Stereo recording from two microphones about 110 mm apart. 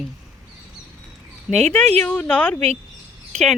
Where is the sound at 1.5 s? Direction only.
10° left (ahead or behind).